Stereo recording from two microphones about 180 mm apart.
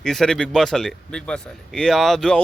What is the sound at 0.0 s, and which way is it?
Speech, 5° left (ahead or behind).